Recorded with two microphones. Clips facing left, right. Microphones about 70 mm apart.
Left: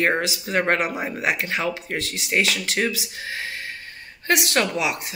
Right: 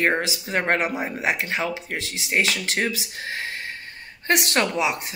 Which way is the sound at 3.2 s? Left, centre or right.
Right.